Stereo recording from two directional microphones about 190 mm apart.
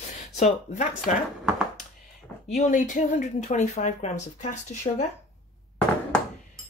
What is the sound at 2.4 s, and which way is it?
Speech, 40° left (ahead or behind).